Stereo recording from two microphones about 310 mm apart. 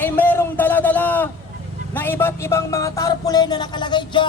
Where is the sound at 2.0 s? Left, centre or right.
Centre.